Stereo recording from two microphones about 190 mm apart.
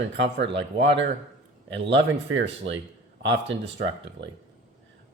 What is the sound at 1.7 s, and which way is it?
Speech, 65° right (ahead or behind).